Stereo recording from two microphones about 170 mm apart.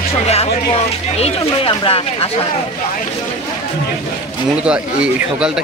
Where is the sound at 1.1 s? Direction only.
35° left (ahead or behind).